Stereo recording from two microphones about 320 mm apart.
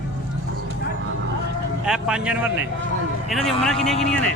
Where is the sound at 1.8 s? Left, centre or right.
Centre.